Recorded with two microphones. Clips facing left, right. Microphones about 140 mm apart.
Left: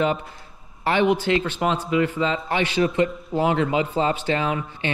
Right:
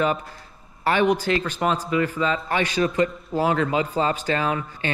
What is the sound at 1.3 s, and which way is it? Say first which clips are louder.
Speech: left 1 dB; 20° left (ahead or behind).